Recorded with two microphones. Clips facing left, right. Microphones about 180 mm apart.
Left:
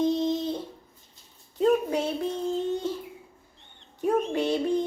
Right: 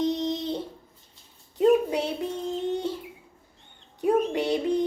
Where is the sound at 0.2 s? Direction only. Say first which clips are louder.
Left 2 dB; 20° right (ahead or behind).